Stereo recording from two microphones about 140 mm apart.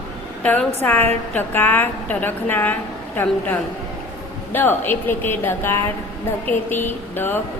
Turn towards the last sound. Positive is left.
turn(degrees=15)  # may be behind; listen again after turning